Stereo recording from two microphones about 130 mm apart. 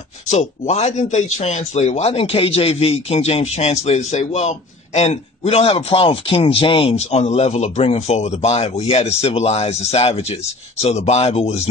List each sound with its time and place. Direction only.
0.3 s a man's voice: 60° left (ahead or behind)